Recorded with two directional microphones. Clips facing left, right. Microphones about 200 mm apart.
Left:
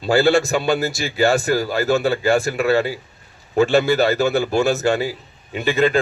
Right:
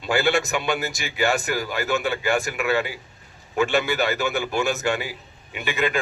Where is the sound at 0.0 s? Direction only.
35° left (ahead or behind).